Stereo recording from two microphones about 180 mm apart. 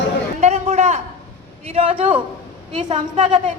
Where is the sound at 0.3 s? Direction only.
35° right (ahead or behind).